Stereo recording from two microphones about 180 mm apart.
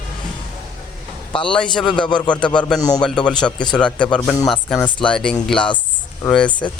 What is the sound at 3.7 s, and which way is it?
Speech, 5° left (ahead or behind).